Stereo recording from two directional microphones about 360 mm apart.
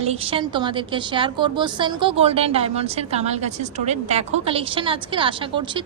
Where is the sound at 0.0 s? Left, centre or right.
Centre.